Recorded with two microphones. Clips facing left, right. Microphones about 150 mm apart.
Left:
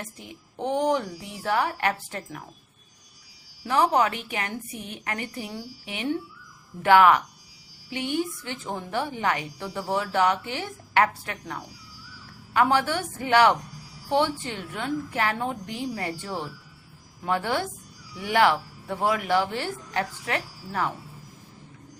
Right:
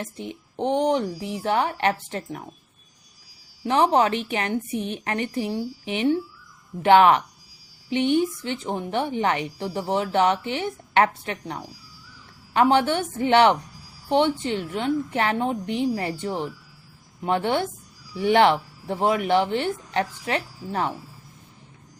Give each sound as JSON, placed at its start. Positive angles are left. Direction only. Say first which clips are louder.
{"t": 0.0, "sound": "a woman's voice", "louder": "right 7 dB", "side_deg": -25}
{"t": 3.6, "sound": "a woman's voice", "louder": "right 3 dB", "side_deg": -25}